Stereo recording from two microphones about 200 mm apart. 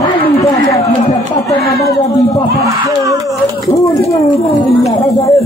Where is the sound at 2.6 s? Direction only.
15° right (ahead or behind).